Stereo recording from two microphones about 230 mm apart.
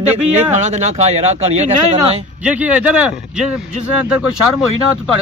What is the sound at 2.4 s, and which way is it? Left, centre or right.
Speech, centre.